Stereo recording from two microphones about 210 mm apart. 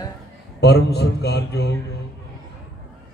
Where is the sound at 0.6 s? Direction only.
50° left (ahead or behind).